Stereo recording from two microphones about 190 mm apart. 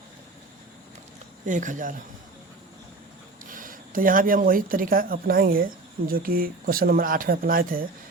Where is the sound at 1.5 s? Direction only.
40° right (ahead or behind).